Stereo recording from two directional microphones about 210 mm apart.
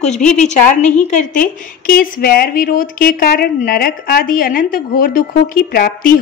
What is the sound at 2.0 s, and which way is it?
Speech, 45° left (ahead or behind).